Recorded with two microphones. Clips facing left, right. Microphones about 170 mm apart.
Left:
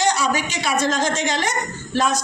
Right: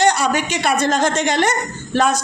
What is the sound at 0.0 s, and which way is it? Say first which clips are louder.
A man's voice: right 4 dB; 65° right (ahead or behind).